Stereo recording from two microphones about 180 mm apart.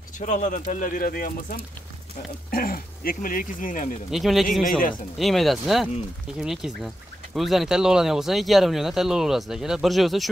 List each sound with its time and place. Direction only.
0.2 s speech: 45° left (ahead or behind)
4.1 s speech: centre (ahead or behind)